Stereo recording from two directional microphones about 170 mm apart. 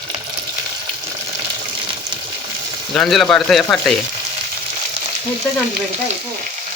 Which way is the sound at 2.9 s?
Centre (ahead or behind).